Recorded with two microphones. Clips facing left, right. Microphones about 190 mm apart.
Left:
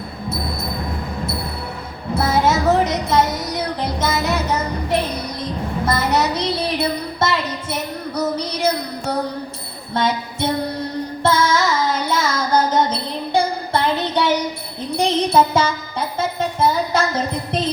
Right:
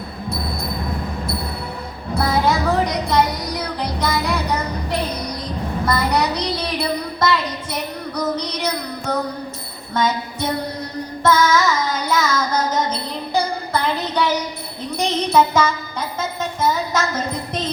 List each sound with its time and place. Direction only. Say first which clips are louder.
2.1 s music: left 1 dB; 25° left (ahead or behind)
5.8 s music: left 1 dB; 25° left (ahead or behind)
8.4 s child singing: left 3 dB; 30° left (ahead or behind)
9.9 s a sound: even; 30° left (ahead or behind)
11.2 s music: right 2 dB; 30° left (ahead or behind)
12.0 s child singing: right 1 dB; 30° left (ahead or behind)
14.9 s music: left 1 dB; 30° left (ahead or behind)